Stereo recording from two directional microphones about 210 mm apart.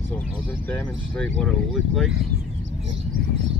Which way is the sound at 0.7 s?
5° left (ahead or behind).